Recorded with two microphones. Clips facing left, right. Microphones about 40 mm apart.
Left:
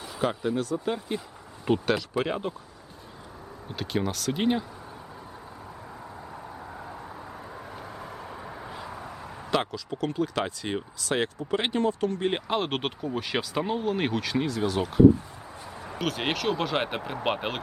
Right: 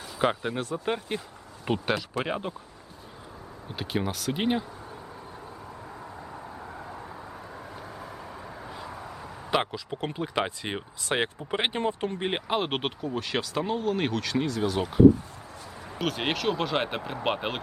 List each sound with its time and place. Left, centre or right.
0.2 s speech: right
1.6 s speech: centre
3.7 s speech: centre
6.0 s vehicle: centre
9.5 s speech: centre
12.5 s speech: centre